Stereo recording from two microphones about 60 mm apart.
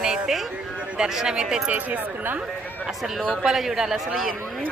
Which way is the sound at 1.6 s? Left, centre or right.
Right.